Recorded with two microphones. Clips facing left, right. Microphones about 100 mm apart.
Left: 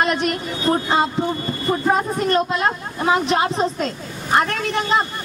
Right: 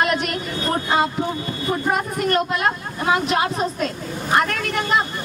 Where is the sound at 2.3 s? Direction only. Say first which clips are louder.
Left 1 dB; 25° left (ahead or behind).